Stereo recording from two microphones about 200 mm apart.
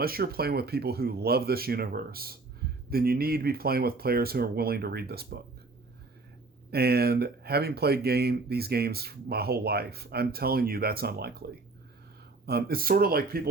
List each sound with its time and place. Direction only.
0.0 s speech: 50° right (ahead or behind)
6.7 s speech: 50° right (ahead or behind)
12.5 s speech: 50° right (ahead or behind)